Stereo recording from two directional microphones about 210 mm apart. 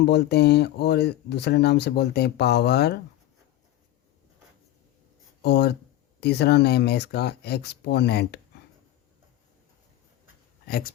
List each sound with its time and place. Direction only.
0.0 s speech: 50° left (ahead or behind)
5.4 s speech: 50° left (ahead or behind)
10.7 s speech: 45° left (ahead or behind)